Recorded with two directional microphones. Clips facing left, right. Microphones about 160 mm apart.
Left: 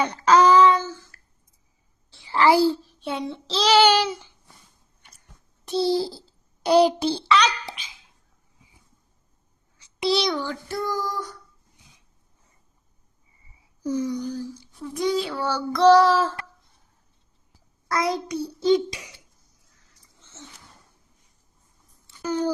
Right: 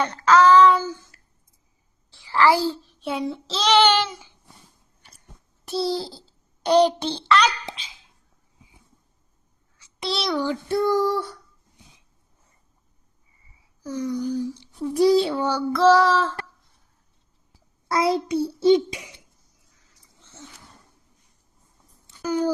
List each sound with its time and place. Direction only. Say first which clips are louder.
0.0 s child singing: even; 15° left (ahead or behind)
0.6 s child singing: right 1 dB; centre (ahead or behind)
2.1 s a sound: left 1 dB; 20° left (ahead or behind)
3.0 s child singing: right 2 dB; centre (ahead or behind)
5.6 s a child's voice: left 3 dB; centre (ahead or behind)
7.6 s babbling: right 1 dB; 25° right (ahead or behind)
10.0 s child singing: left 3 dB; centre (ahead or behind)
10.4 s child singing: right 7 dB; 20° right (ahead or behind)
14.5 s a child's voice: right 7 dB; 25° right (ahead or behind)
15.4 s child singing: right 2 dB; 15° right (ahead or behind)
15.7 s child singing: left 2 dB; centre (ahead or behind)
17.8 s child singing: right 3 dB; 25° right (ahead or behind)
22.0 s a sound: right 2 dB; 10° right (ahead or behind)